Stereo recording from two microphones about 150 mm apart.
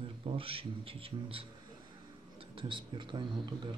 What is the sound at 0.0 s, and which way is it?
Speech, 35° right (ahead or behind).